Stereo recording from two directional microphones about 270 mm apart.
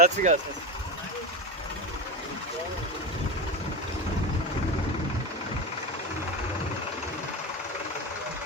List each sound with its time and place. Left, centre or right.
0.0 s speech: right